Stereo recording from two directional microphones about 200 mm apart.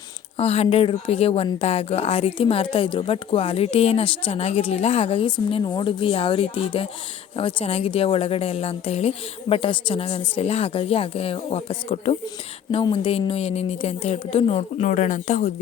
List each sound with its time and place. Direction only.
0.3 s speech: 30° left (ahead or behind)